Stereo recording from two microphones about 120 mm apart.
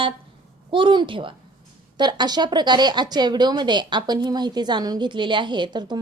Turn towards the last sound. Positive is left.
turn(degrees=-40)  # may be behind; listen again after turning